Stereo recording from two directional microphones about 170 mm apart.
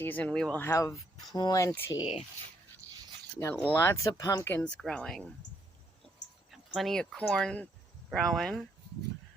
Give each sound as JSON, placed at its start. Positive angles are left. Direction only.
{"t": 0.0, "sound": "speech", "side_deg": 10}
{"t": 0.7, "sound": "speech", "side_deg": 20}
{"t": 2.0, "sound": "speech", "side_deg": 35}
{"t": 2.8, "sound": "zipper", "side_deg": 10}
{"t": 3.3, "sound": "speech", "side_deg": 10}
{"t": 6.7, "sound": "speech", "side_deg": 0}